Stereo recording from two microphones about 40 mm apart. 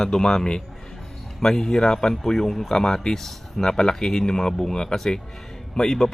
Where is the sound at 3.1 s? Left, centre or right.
Centre.